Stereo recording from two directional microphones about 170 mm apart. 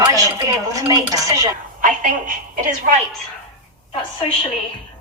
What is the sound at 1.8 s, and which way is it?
Speech, 50° right (ahead or behind).